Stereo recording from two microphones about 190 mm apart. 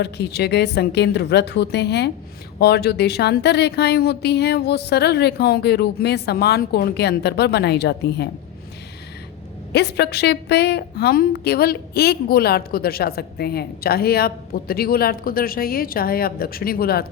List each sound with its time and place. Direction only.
0.0 s a woman's voice: 60° left (ahead or behind)
9.7 s a woman's voice: 60° left (ahead or behind)